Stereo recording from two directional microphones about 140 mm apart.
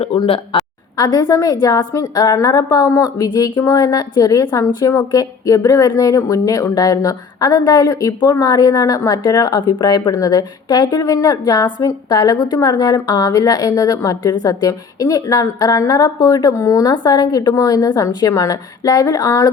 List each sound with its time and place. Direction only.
0.0 s speech: 40° left (ahead or behind)
0.9 s a woman's voice: 30° left (ahead or behind)